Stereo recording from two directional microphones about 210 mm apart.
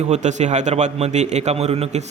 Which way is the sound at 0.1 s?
35° right (ahead or behind).